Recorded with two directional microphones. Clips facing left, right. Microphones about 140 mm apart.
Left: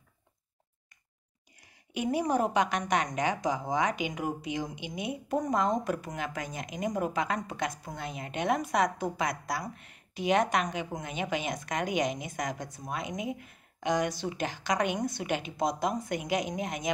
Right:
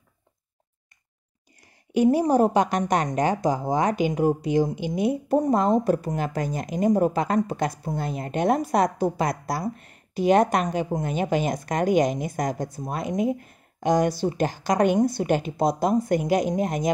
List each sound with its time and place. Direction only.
2.0 s a woman's voice: 35° right (ahead or behind)